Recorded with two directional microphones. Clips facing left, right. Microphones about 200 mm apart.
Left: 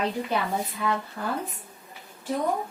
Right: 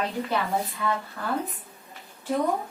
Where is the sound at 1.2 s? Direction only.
10° left (ahead or behind).